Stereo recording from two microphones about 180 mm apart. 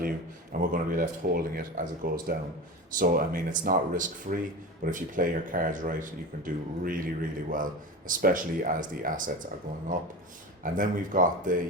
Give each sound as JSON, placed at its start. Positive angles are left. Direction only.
{"t": 0.6, "sound": "speech", "side_deg": -50}